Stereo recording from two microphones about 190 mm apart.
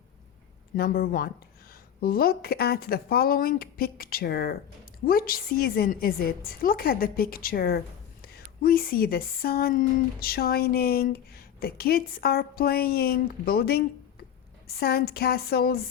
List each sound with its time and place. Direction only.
0.8 s speech: 50° left (ahead or behind)